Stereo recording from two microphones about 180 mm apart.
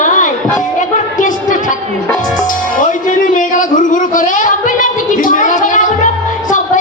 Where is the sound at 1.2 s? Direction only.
45° left (ahead or behind).